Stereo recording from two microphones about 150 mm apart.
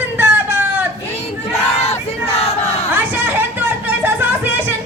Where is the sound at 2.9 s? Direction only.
15° right (ahead or behind).